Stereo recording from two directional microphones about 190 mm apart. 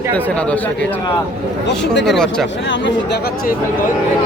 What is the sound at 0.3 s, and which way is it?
Speech, 5° left (ahead or behind).